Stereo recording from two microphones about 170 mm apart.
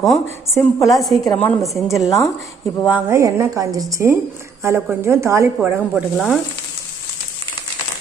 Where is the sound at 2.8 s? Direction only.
15° right (ahead or behind).